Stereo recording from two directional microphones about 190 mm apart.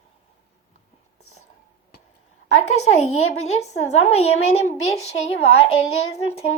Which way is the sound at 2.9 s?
35° left (ahead or behind).